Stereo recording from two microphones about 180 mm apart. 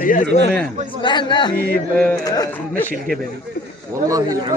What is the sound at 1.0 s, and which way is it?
Speech, 25° left (ahead or behind).